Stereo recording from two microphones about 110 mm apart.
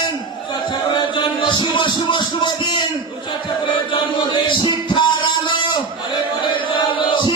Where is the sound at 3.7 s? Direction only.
45° left (ahead or behind).